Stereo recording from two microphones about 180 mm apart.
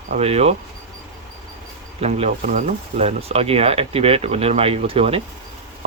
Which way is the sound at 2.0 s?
35° right (ahead or behind).